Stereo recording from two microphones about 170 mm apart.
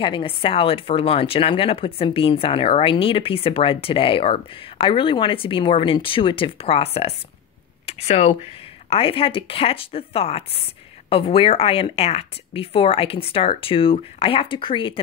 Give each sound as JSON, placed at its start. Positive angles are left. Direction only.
{"t": 0.0, "sound": "speech", "side_deg": 30}